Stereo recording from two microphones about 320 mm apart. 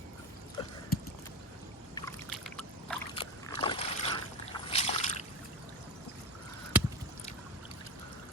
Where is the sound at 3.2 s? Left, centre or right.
Centre.